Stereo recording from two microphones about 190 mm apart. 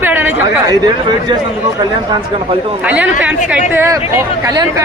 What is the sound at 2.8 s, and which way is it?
Speech, 5° right (ahead or behind).